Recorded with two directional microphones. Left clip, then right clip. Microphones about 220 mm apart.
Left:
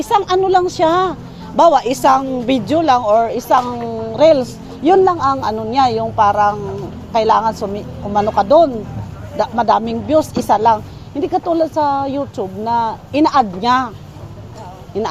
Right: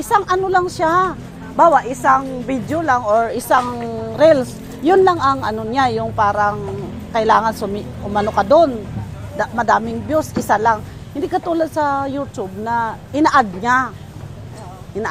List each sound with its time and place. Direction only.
0.0 s a woman's voice: 15° left (ahead or behind)